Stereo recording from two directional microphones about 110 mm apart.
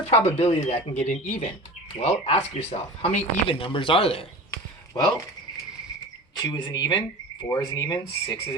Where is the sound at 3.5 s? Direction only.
50° left (ahead or behind).